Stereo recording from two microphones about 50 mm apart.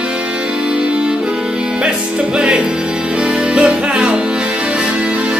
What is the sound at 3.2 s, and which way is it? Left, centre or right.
Music, centre.